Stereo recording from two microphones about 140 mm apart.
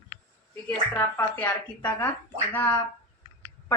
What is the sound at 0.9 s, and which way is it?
Speech, 15° left (ahead or behind).